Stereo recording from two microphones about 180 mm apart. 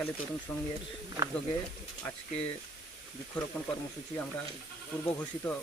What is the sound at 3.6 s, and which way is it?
Speech, 5° left (ahead or behind).